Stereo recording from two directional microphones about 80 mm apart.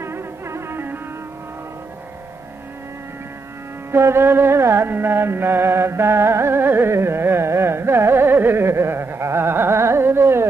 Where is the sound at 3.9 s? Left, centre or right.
Right.